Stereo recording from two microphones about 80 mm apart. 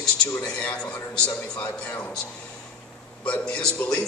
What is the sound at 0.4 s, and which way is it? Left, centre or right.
A man's voice, centre.